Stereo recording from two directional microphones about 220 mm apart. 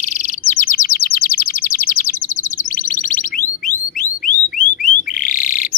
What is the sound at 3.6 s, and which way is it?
Alarm, 40° left (ahead or behind).